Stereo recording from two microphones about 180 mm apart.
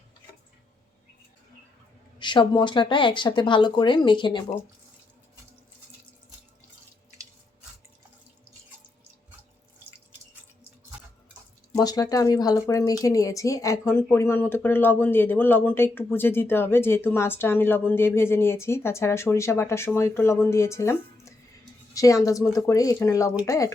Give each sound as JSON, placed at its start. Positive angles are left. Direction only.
{"t": 2.1, "sound": "speech", "side_deg": 25}
{"t": 11.8, "sound": "speech", "side_deg": 20}